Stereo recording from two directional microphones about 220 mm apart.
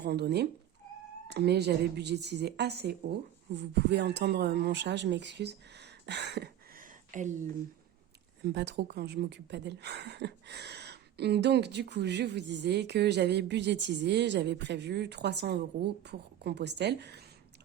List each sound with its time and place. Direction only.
0.0 s speech: 50° right (ahead or behind)
8.4 s speech: 50° right (ahead or behind)